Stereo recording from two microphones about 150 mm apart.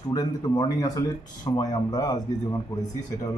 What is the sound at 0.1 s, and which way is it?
Speech, 25° left (ahead or behind).